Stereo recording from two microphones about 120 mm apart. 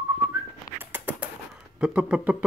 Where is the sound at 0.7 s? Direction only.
15° right (ahead or behind).